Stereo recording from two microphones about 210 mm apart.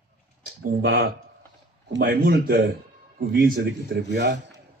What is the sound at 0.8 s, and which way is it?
A man's voice, 50° right (ahead or behind).